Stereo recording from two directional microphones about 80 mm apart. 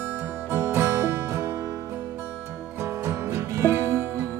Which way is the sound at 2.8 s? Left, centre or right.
Right.